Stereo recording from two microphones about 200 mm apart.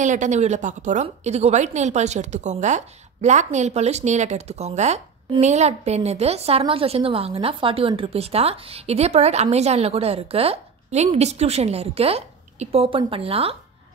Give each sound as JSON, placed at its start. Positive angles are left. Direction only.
{"t": 0.0, "sound": "a woman's voice", "side_deg": -40}